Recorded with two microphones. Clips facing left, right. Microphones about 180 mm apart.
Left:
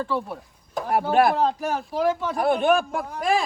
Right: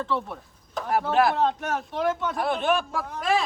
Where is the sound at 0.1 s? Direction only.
5° left (ahead or behind).